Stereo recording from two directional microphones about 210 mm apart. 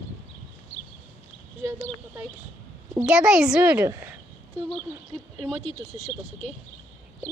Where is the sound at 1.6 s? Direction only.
10° right (ahead or behind).